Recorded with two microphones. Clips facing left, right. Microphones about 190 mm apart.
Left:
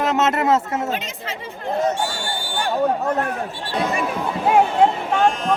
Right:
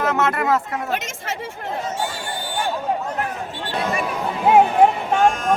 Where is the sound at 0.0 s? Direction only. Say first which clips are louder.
Left 2 dB; 20° left (ahead or behind).